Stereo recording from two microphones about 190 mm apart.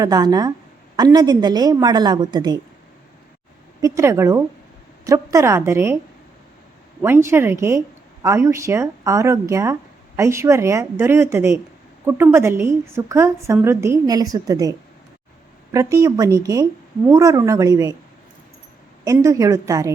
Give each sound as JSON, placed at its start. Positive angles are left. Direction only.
{"t": 0.0, "sound": "a woman's voice", "side_deg": -20}
{"t": 3.8, "sound": "a woman's voice", "side_deg": -15}
{"t": 7.0, "sound": "a woman's voice", "side_deg": -15}
{"t": 19.0, "sound": "a woman's voice", "side_deg": -15}